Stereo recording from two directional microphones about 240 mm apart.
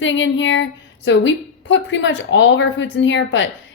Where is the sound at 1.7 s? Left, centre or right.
Left.